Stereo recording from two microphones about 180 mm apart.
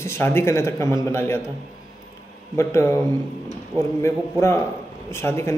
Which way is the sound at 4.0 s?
15° left (ahead or behind).